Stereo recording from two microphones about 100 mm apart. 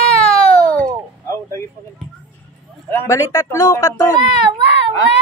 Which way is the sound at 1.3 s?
30° left (ahead or behind).